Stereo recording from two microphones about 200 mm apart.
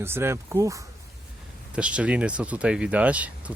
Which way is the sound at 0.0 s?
10° right (ahead or behind).